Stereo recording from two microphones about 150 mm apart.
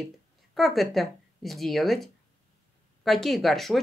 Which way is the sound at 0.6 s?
Centre (ahead or behind).